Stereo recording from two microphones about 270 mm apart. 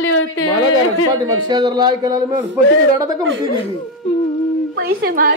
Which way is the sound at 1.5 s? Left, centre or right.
Centre.